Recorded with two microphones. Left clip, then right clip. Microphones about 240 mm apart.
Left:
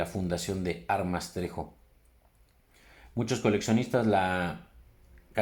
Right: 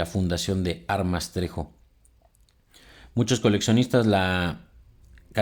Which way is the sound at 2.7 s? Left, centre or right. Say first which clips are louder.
Right 7 dB; right.